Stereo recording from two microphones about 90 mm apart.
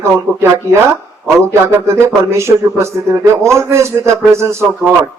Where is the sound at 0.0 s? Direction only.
30° right (ahead or behind).